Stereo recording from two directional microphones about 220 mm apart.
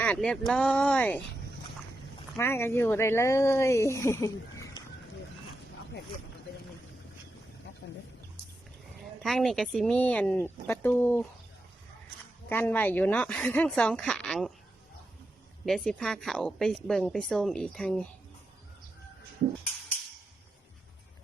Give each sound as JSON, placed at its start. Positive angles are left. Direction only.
{"t": 0.0, "sound": "speech", "side_deg": 5}
{"t": 2.3, "sound": "speech", "side_deg": 10}
{"t": 7.8, "sound": "wild animals", "side_deg": 50}
{"t": 9.2, "sound": "speech", "side_deg": 0}
{"t": 12.5, "sound": "speech", "side_deg": 10}
{"t": 15.6, "sound": "speech", "side_deg": 0}